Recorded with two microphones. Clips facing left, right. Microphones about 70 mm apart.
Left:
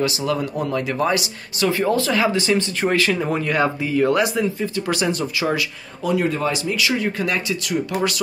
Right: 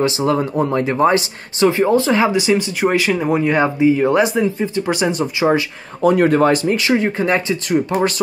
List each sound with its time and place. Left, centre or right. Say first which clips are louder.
0.0 s speech: right 5 dB; right
6.0 s speech: right 8 dB; right